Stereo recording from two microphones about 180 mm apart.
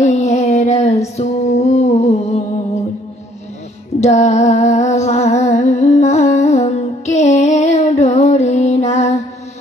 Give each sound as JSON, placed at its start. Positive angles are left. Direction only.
{"t": 0.0, "sound": "music", "side_deg": 40}
{"t": 4.0, "sound": "humming", "side_deg": 40}